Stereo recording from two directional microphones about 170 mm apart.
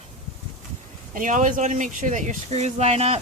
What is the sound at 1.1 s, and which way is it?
Speech, 50° right (ahead or behind).